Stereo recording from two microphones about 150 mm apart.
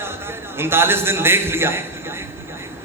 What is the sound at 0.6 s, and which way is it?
A man's voice, 15° right (ahead or behind).